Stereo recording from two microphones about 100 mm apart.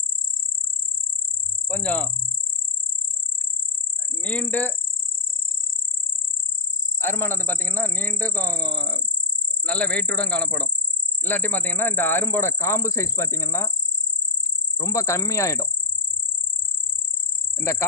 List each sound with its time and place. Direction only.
1.7 s a man's voice: 15° left (ahead or behind)
4.2 s speech: 15° left (ahead or behind)
7.0 s a man's voice: 25° left (ahead or behind)
14.8 s speech: 30° left (ahead or behind)
17.6 s speech: 30° left (ahead or behind)